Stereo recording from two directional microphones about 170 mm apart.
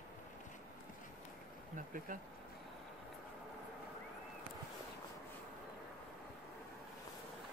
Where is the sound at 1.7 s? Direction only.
50° right (ahead or behind).